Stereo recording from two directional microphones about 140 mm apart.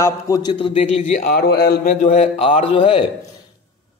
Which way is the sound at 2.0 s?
50° left (ahead or behind).